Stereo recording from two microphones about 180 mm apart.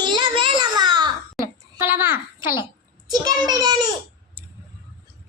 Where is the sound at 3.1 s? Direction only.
20° right (ahead or behind).